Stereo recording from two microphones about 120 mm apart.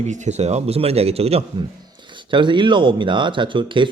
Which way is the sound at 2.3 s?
40° right (ahead or behind).